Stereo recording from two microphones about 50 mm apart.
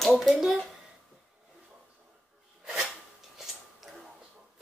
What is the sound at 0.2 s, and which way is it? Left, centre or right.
Speech, centre.